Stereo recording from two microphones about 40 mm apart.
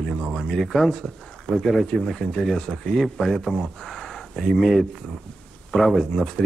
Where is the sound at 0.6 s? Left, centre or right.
Centre.